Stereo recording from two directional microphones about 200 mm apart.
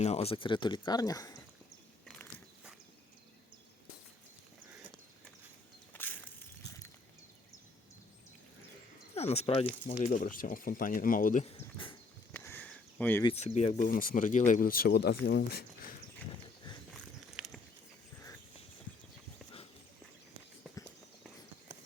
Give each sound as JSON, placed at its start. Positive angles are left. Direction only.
{"t": 0.0, "sound": "speech", "side_deg": 30}
{"t": 2.0, "sound": "biting", "side_deg": 5}
{"t": 5.9, "sound": "a sound", "side_deg": 10}
{"t": 9.1, "sound": "speech", "side_deg": 30}
{"t": 9.8, "sound": "speech", "side_deg": 40}
{"t": 12.3, "sound": "a sound", "side_deg": 10}
{"t": 13.2, "sound": "speech", "side_deg": 35}
{"t": 16.9, "sound": "biting", "side_deg": 0}
{"t": 20.7, "sound": "run", "side_deg": 0}